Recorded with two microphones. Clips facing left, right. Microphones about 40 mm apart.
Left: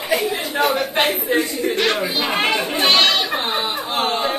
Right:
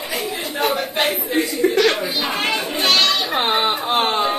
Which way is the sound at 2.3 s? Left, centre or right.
Left.